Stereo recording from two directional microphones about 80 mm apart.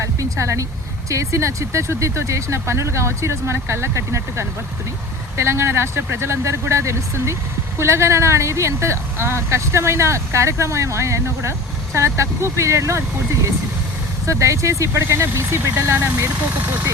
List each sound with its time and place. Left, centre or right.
0.0 s speech: right
14.3 s speech: right